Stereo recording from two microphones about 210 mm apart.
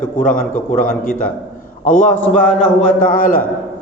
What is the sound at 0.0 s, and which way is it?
A man's voice, 40° left (ahead or behind).